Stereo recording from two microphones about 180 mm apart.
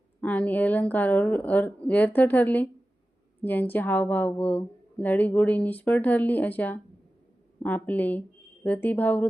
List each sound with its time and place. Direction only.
0.2 s a woman's voice: 10° left (ahead or behind)